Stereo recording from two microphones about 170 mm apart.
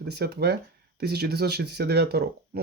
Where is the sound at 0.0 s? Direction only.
75° right (ahead or behind).